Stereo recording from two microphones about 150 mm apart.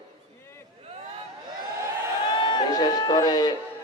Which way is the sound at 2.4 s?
30° left (ahead or behind).